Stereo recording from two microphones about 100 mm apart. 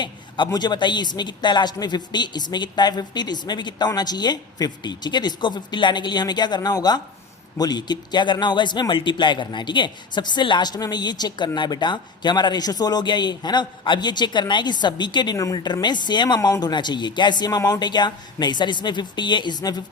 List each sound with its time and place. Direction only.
0.0 s a man's voice: 45° left (ahead or behind)